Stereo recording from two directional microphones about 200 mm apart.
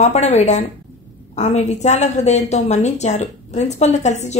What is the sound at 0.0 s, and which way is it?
A woman's voice, 35° left (ahead or behind).